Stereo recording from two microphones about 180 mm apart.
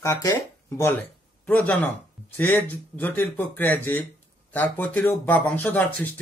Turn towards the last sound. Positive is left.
turn(degrees=10)  # may be behind; listen again after turning